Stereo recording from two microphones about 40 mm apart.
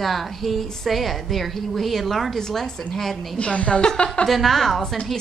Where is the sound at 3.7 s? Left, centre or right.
Centre.